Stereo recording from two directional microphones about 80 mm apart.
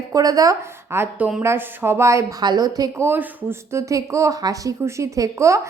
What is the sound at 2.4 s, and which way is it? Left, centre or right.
Speech, right.